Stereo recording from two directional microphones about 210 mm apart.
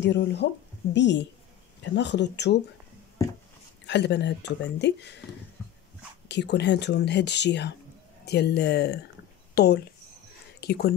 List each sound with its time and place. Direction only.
0.0 s speech: 55° left (ahead or behind)
3.8 s speech: 55° left (ahead or behind)
6.2 s speech: 55° left (ahead or behind)